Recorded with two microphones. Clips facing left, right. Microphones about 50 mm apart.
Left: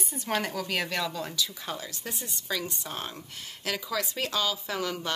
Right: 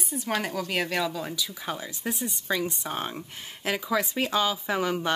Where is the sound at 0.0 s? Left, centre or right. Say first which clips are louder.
Right 1 dB; centre.